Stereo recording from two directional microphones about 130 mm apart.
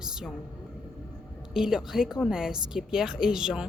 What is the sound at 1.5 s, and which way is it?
A woman's voice, 5° right (ahead or behind).